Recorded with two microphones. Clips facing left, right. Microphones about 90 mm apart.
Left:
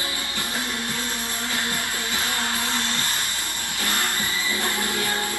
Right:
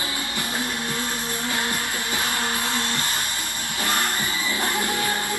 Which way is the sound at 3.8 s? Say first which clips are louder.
Right 2 dB; 20° right (ahead or behind).